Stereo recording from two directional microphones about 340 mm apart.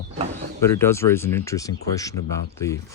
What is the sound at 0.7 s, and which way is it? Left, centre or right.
Speech, centre.